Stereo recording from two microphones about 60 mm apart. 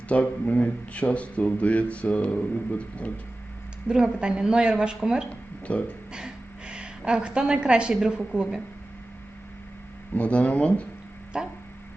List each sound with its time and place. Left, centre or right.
0.1 s speech: left
3.8 s a woman's voice: centre
5.3 s a sound: left
6.1 s a sound: centre
7.9 s a woman's voice: centre
10.2 s speech: left
11.3 s a woman's voice: centre